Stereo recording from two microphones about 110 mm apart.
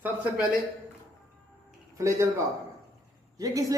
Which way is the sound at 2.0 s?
25° right (ahead or behind).